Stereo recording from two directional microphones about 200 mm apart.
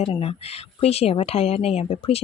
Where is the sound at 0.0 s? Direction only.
30° left (ahead or behind).